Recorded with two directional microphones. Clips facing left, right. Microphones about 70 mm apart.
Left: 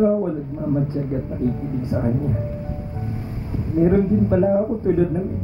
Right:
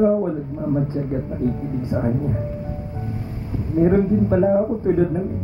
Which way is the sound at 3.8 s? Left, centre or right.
Right.